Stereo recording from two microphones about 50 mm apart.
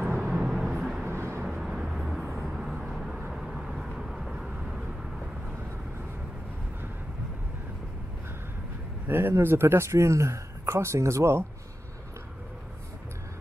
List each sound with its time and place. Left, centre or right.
0.0 s vehicle: right
0.3 s vehicle: centre
1.0 s vehicle: right
1.6 s vehicle: centre
9.0 s a sound: right
9.4 s speech: right